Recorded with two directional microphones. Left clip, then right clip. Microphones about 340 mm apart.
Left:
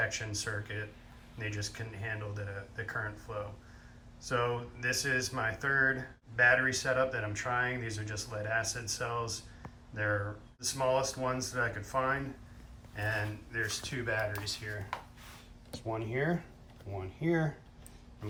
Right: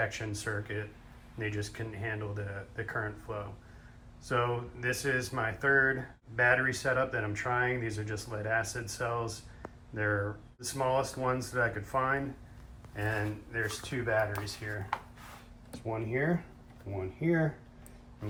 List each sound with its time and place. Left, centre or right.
0.0 s speech: centre